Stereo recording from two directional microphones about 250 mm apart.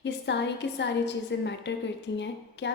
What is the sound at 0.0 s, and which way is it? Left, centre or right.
A woman's voice, left.